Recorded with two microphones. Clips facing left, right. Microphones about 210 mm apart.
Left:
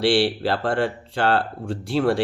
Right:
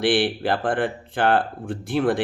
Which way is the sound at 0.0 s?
15° right (ahead or behind).